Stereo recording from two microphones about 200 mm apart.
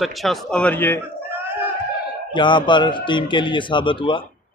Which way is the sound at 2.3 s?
25° left (ahead or behind).